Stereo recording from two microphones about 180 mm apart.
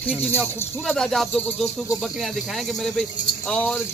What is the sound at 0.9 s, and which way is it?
Speech, centre (ahead or behind).